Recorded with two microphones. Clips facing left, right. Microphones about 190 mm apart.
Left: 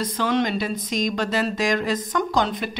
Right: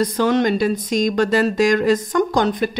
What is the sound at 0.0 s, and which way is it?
Speech, 45° right (ahead or behind).